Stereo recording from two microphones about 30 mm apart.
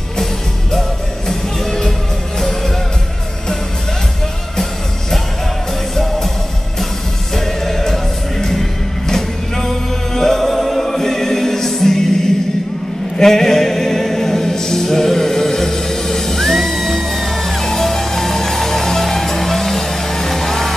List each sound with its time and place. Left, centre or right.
1.3 s music: centre
7.3 s music: centre
13.2 s music: centre